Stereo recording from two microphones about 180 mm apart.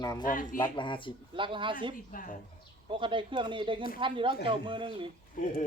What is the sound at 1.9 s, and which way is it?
Speech, 50° left (ahead or behind).